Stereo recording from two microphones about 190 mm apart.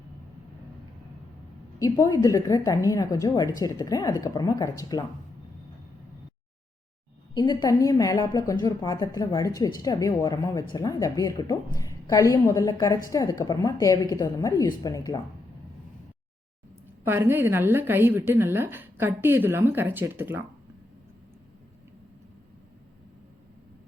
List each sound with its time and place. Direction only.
1.8 s speech: 20° left (ahead or behind)
7.3 s speech: 20° left (ahead or behind)
17.1 s a woman's voice: 10° right (ahead or behind)